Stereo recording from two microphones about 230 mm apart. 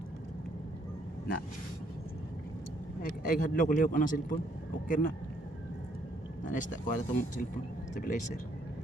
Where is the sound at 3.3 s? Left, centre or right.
Left.